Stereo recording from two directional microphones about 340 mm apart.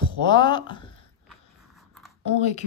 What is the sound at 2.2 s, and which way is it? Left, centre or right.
Speech, centre.